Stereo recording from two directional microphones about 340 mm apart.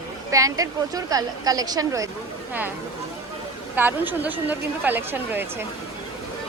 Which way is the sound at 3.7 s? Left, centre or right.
Centre.